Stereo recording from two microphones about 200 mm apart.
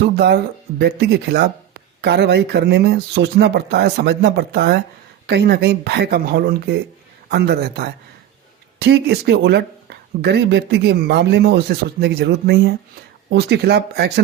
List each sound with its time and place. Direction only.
0.0 s speech: 55° right (ahead or behind)